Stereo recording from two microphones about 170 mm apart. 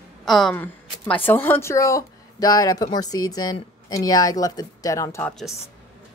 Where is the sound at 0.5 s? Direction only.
10° left (ahead or behind).